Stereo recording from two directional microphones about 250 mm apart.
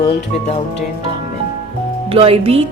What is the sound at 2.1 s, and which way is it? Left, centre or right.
Speech, right.